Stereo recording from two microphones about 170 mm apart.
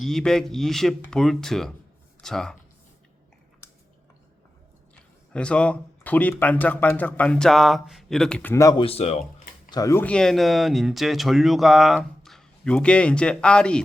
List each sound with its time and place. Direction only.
0.0 s speech: 5° left (ahead or behind)
5.3 s speech: 5° left (ahead or behind)
8.8 s speech: 35° left (ahead or behind)
9.6 s speech: 20° left (ahead or behind); by 13.8 s 5° left (ahead or behind)